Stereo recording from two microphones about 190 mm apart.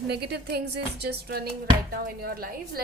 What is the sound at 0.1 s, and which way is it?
Speech, 60° right (ahead or behind).